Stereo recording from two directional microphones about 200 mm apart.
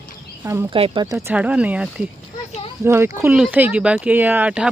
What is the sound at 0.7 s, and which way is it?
Speech, 25° right (ahead or behind).